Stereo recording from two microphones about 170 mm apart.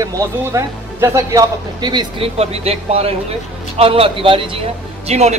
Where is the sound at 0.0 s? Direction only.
20° right (ahead or behind).